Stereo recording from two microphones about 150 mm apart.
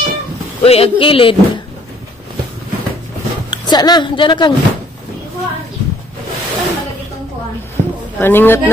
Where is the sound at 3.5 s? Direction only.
25° left (ahead or behind).